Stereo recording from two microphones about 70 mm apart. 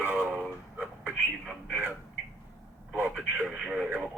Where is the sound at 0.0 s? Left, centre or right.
Right.